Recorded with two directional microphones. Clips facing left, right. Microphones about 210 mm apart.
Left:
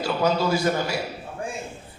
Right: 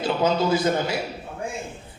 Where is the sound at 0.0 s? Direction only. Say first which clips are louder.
Right 1 dB; 20° right (ahead or behind).